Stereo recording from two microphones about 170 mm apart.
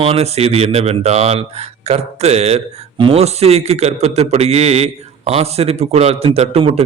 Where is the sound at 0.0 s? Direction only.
35° right (ahead or behind).